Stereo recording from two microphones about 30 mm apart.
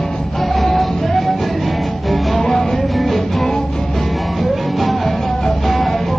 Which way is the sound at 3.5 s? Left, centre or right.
Centre.